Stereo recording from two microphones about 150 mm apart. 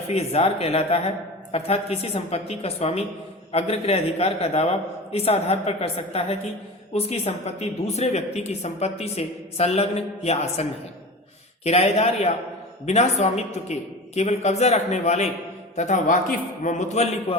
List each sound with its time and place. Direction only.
0.1 s speech: 45° left (ahead or behind)